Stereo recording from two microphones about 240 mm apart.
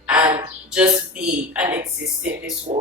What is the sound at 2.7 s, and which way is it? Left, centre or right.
Speech, right.